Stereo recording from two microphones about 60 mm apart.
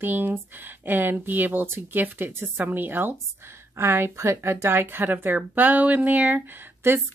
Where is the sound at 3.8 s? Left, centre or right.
Right.